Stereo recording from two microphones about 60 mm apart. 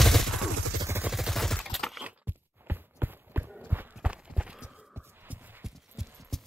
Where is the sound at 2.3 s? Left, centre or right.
Right.